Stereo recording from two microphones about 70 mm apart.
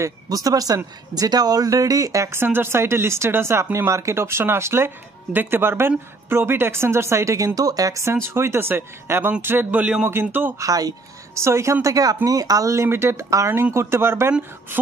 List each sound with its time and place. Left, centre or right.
0.0 s speech: right
2.3 s speech: right
8.0 s speech: right; by 10.0 s centre
10.6 s speech: right
11.3 s speech: right
12.8 s speech: right
13.5 s speech: right